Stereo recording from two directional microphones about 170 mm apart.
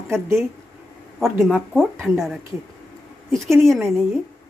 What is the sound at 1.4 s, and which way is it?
Speech, centre (ahead or behind).